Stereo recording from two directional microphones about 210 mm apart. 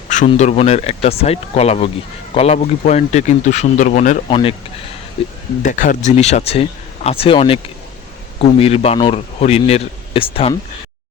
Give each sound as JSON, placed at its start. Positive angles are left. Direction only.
{"t": 0.3, "sound": "speech", "side_deg": 30}
{"t": 4.3, "sound": "speech", "side_deg": 25}
{"t": 5.6, "sound": "speech", "side_deg": 40}